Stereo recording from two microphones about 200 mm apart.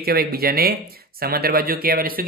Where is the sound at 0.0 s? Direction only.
50° right (ahead or behind).